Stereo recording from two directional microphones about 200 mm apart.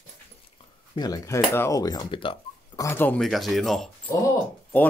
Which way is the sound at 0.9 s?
20° left (ahead or behind).